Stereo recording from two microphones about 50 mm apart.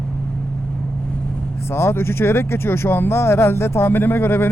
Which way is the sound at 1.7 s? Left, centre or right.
Left.